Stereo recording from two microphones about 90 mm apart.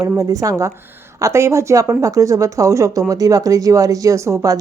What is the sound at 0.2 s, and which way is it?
Speech, 40° right (ahead or behind).